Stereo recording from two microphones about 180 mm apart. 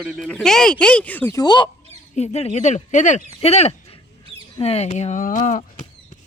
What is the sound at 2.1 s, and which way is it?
Speech, 35° left (ahead or behind).